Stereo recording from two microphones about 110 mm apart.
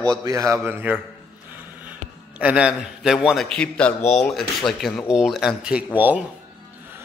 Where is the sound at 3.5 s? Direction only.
10° left (ahead or behind); by 5.8 s 5° right (ahead or behind).